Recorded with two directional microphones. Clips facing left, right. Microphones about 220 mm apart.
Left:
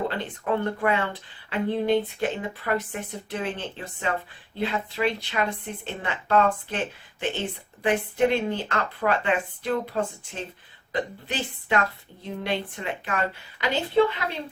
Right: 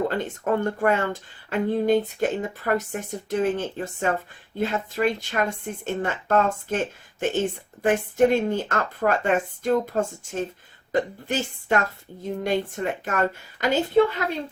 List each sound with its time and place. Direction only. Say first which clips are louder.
0.1 s speech: right 3 dB; 45° right (ahead or behind)